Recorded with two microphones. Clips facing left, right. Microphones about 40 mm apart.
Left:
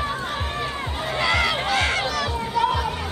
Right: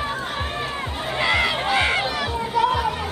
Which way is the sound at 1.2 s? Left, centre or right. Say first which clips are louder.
Right 1 dB; centre.